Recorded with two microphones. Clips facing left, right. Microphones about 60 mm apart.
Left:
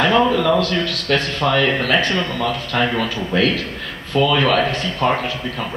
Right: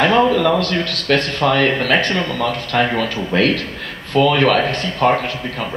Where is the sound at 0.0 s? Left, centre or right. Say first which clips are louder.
Right 2 dB; right.